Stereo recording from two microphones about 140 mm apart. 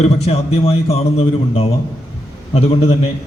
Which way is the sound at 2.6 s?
45° left (ahead or behind).